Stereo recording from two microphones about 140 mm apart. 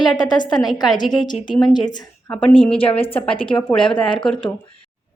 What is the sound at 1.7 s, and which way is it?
Speech, 30° left (ahead or behind).